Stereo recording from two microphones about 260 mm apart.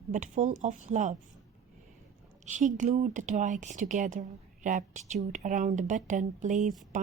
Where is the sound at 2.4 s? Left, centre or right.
Right.